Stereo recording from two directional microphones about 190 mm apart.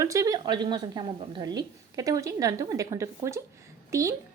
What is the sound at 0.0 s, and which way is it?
A woman's voice, 15° right (ahead or behind).